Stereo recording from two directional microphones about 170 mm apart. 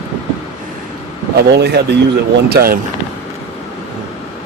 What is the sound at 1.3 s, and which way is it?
Speech, 75° right (ahead or behind).